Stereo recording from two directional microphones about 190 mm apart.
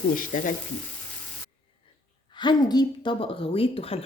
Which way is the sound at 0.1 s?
45° left (ahead or behind).